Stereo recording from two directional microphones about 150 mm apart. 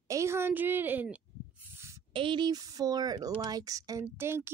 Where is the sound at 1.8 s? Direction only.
20° right (ahead or behind).